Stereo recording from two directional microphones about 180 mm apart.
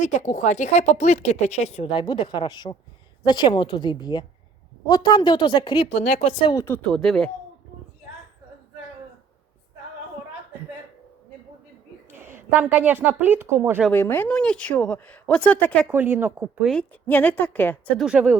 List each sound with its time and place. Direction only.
0.2 s a woman's voice: 45° left (ahead or behind); by 5.9 s 25° left (ahead or behind)
6.0 s speech: 40° left (ahead or behind)
6.5 s a woman's voice: 20° left (ahead or behind)
6.8 s speech: 5° left (ahead or behind)
12.1 s a woman's voice: 10° right (ahead or behind)
13.9 s speech: 10° left (ahead or behind)
15.9 s a woman's voice: 10° right (ahead or behind)
16.6 s speech: 5° left (ahead or behind)
18.0 s a woman's voice: 5° right (ahead or behind)